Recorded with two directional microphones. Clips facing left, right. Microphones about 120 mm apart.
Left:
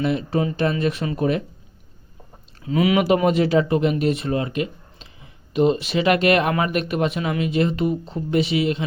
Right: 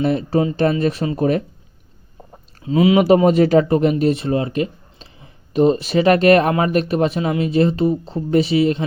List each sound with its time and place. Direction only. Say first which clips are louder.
0.0 s speech: right 4 dB; 40° right (ahead or behind)
2.6 s speech: right 5 dB; 25° right (ahead or behind)